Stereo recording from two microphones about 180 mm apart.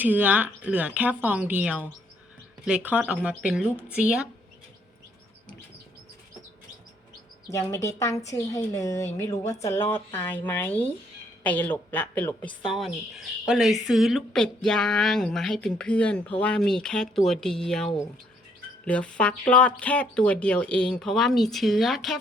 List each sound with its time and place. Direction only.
0.0 s a woman's voice: 10° right (ahead or behind)
7.5 s a woman's voice: 15° left (ahead or behind)